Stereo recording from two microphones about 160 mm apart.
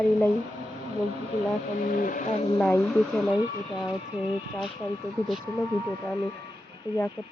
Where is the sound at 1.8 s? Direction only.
55° left (ahead or behind).